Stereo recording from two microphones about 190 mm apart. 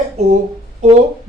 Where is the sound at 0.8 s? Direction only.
35° right (ahead or behind).